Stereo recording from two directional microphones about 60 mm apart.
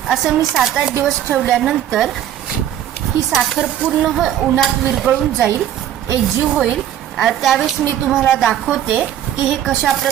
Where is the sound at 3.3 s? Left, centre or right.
Centre.